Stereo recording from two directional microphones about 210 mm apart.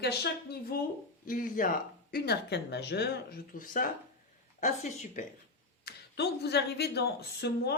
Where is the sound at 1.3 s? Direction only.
40° left (ahead or behind).